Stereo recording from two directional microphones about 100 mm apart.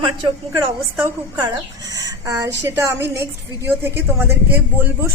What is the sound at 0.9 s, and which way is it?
Speech, 20° right (ahead or behind).